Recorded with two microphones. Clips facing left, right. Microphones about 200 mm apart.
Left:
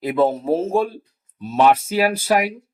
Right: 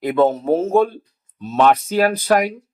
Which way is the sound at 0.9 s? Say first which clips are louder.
Left 1 dB; 5° left (ahead or behind).